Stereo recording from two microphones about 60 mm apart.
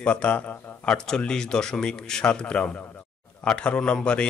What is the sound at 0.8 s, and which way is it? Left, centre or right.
A man's voice, centre.